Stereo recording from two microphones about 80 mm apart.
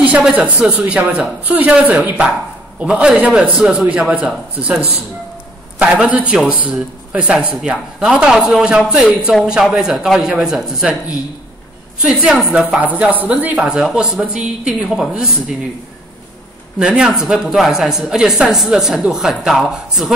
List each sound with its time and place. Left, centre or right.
0.0 s speech: centre
12.0 s speech: centre
12.6 s speech: right; by 15.3 s centre
16.7 s speech: centre